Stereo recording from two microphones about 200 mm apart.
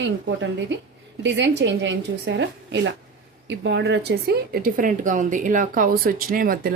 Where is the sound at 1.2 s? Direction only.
65° right (ahead or behind).